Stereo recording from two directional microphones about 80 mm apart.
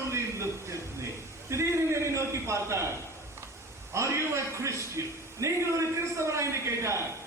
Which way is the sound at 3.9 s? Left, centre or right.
Right.